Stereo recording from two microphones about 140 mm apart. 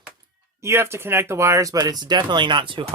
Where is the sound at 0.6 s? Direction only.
20° right (ahead or behind).